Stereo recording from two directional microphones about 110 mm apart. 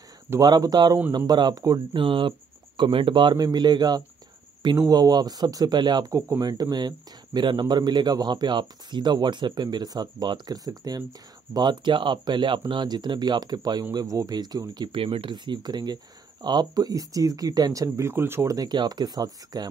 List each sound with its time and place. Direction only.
0.4 s speech: 35° right (ahead or behind)
2.0 s speech: 50° right (ahead or behind)
15.0 s speech: 50° right (ahead or behind); by 19.7 s 35° right (ahead or behind)